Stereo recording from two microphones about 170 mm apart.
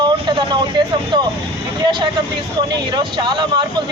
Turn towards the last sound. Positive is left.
turn(degrees=-25)  # may be behind; listen again after turning